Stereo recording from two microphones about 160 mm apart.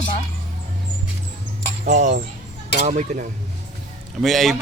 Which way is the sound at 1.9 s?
45° right (ahead or behind).